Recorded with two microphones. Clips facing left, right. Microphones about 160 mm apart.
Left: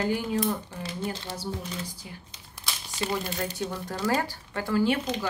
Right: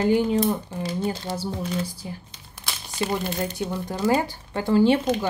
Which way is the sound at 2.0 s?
35° right (ahead or behind).